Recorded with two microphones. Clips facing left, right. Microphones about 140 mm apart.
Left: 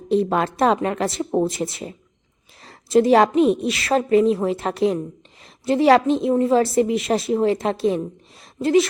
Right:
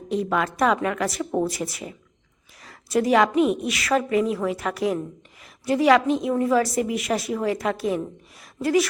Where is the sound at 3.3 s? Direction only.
30° left (ahead or behind).